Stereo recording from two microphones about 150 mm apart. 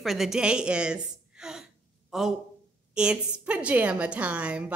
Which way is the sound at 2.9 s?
5° right (ahead or behind).